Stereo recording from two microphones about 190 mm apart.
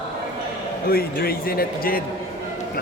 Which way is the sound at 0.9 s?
55° left (ahead or behind).